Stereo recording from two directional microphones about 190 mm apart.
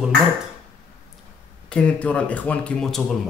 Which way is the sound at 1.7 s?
5° left (ahead or behind).